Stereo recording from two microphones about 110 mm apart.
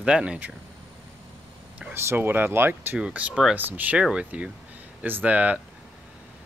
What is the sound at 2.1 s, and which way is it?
Speech, 20° right (ahead or behind).